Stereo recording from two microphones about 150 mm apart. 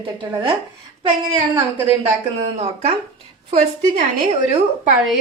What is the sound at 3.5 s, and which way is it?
Speech, 50° right (ahead or behind).